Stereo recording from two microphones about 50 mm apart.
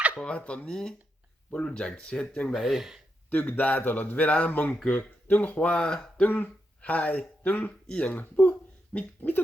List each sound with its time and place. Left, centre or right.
0.3 s speech: left
2.5 s speech: centre
3.2 s a man's voice: left
5.7 s speech: centre
6.2 s speech: left
8.2 s a sound: left